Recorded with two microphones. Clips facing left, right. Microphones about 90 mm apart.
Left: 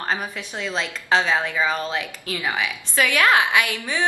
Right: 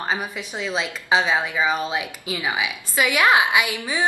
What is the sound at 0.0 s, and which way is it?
A woman's voice, 5° right (ahead or behind).